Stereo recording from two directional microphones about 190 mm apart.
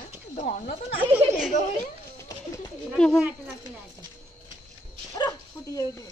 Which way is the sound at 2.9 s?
5° left (ahead or behind).